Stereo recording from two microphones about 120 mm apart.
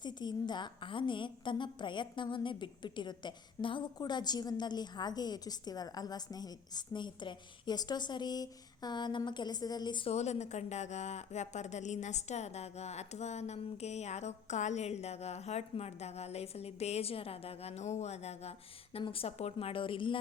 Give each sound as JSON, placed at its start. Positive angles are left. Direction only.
{"t": 0.0, "sound": "a woman's voice", "side_deg": 35}
{"t": 10.1, "sound": "speech", "side_deg": 70}
{"t": 18.9, "sound": "a woman's voice", "side_deg": 50}